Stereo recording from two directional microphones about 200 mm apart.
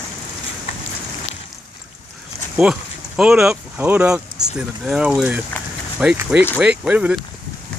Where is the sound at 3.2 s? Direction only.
5° right (ahead or behind).